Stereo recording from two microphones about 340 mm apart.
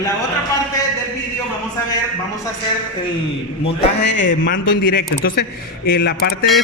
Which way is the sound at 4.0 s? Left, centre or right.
Left.